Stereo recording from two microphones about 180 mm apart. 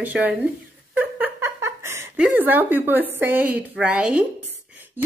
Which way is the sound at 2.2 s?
10° right (ahead or behind).